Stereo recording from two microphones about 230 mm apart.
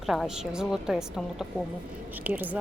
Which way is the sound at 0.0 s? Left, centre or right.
Centre.